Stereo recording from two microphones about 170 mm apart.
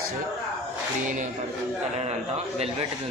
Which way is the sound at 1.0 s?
50° right (ahead or behind).